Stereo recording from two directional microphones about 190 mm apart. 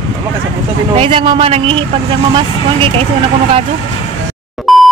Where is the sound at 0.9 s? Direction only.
30° right (ahead or behind).